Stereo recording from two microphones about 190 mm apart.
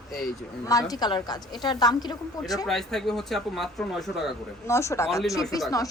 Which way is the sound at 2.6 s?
Centre (ahead or behind).